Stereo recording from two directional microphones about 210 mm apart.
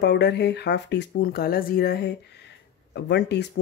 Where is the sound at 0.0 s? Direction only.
55° left (ahead or behind).